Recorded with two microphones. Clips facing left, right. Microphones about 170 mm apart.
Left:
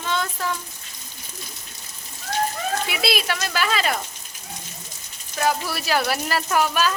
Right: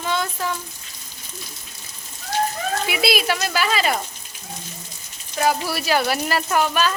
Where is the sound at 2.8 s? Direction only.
5° right (ahead or behind).